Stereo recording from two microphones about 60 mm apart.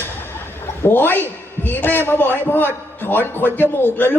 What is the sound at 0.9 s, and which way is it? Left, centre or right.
A man's voice, left.